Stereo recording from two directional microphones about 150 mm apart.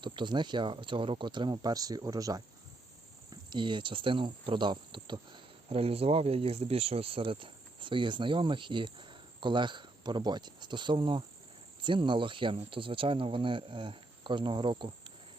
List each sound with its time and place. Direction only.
0.0 s speech: 30° right (ahead or behind)
3.5 s speech: 35° right (ahead or behind)